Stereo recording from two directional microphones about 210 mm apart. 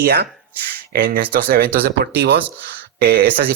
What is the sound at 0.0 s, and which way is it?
Speech, 50° right (ahead or behind).